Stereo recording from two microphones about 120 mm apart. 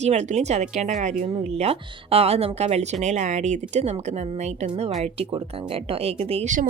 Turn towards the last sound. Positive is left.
turn(degrees=-75)  # may be behind; listen again after turning